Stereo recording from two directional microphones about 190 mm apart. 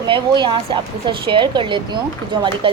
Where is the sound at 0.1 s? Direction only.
25° right (ahead or behind).